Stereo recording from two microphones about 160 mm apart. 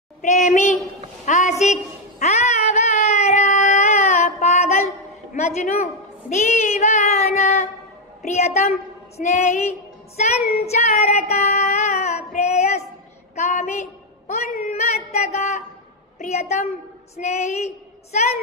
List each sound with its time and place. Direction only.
0.2 s speech: 45° left (ahead or behind)
1.2 s a sound: 50° left (ahead or behind)
5.3 s a woman's voice: 45° left (ahead or behind)
6.3 s child singing: 45° left (ahead or behind)
13.3 s a sound: 45° left (ahead or behind)
16.2 s child singing: 45° left (ahead or behind)